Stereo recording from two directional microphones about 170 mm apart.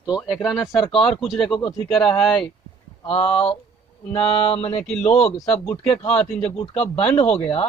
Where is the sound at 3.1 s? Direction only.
35° left (ahead or behind).